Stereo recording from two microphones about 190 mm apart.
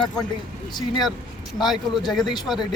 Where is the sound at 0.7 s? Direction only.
20° left (ahead or behind).